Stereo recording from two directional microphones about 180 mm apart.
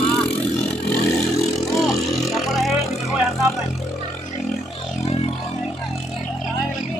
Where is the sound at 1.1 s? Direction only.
Centre (ahead or behind).